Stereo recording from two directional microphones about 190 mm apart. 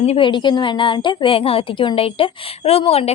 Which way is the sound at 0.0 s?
30° left (ahead or behind).